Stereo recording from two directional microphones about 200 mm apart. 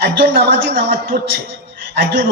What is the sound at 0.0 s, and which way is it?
A man's voice, 50° right (ahead or behind).